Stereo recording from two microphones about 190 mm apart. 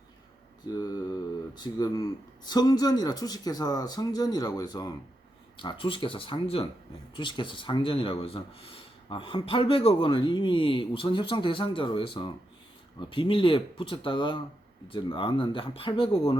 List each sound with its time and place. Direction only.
0.6 s speech: 20° left (ahead or behind)